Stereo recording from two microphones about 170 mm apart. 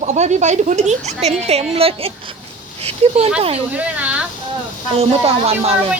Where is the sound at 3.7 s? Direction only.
10° right (ahead or behind).